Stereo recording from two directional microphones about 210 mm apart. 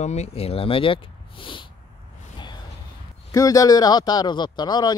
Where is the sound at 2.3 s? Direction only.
20° left (ahead or behind).